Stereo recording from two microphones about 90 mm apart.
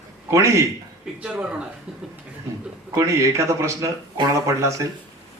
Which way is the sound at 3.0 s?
35° right (ahead or behind).